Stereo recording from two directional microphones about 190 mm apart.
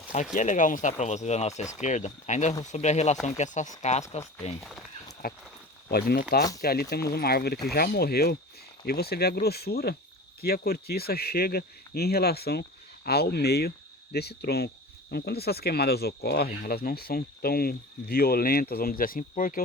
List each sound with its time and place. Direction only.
0.3 s speech: 40° left (ahead or behind)
4.6 s speech: centre (ahead or behind)
5.2 s speech: 50° left (ahead or behind)